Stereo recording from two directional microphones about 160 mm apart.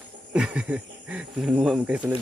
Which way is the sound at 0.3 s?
5° right (ahead or behind).